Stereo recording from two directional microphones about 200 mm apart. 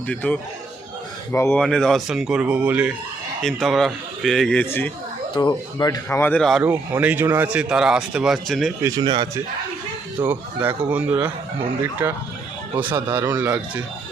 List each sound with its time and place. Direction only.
0.1 s a man's voice: 10° left (ahead or behind)
5.3 s speech: 25° left (ahead or behind); by 6.6 s 5° left (ahead or behind)
6.6 s a man's voice: 10° right (ahead or behind)
8.8 s speech: 20° right (ahead or behind)
10.2 s speech: 10° right (ahead or behind)
13.2 s speech: 10° right (ahead or behind)